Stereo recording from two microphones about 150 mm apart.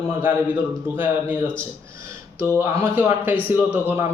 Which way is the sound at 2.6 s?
15° right (ahead or behind).